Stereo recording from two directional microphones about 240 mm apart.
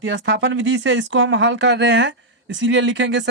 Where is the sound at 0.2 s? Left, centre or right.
Right.